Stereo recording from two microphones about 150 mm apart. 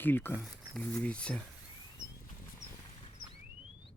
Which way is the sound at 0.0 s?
15° left (ahead or behind).